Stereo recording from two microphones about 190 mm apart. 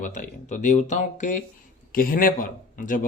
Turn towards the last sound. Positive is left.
turn(degrees=45)  # may be behind; listen again after turning